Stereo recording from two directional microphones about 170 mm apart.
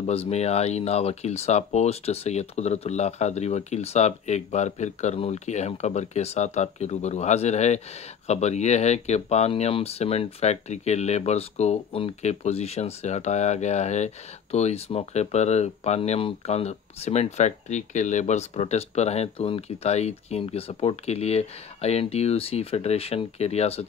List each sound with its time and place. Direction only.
0.0 s speech: 35° left (ahead or behind)